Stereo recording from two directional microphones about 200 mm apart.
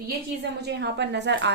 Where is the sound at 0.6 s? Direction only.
55° right (ahead or behind).